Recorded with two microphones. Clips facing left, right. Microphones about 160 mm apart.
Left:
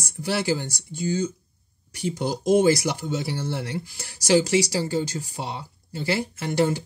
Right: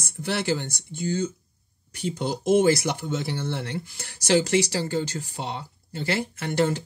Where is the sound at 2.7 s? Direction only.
10° left (ahead or behind).